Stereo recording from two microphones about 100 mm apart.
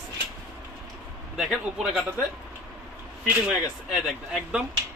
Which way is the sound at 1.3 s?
5° right (ahead or behind).